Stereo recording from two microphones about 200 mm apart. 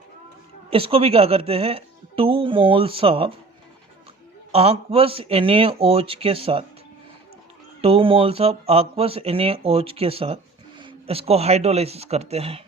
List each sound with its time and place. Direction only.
0.7 s speech: 30° right (ahead or behind)
4.5 s speech: 30° right (ahead or behind)
7.8 s speech: 30° right (ahead or behind)